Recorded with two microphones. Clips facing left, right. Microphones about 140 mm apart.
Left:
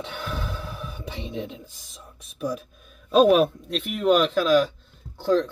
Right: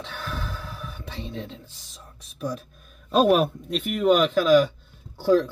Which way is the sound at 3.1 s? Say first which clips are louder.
Left 2 dB; centre (ahead or behind).